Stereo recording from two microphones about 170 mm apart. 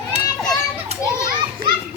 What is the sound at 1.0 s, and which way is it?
Children playing, 15° left (ahead or behind).